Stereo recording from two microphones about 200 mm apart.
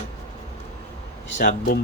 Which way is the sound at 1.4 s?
55° left (ahead or behind).